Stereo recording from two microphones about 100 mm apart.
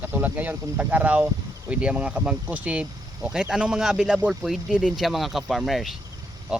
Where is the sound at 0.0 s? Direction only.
15° right (ahead or behind).